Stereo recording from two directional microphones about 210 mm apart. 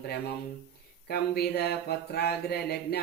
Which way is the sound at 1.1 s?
50° left (ahead or behind).